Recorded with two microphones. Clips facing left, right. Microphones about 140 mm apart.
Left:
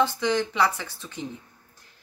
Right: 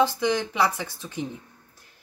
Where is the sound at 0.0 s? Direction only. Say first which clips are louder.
Right 1 dB; 15° right (ahead or behind).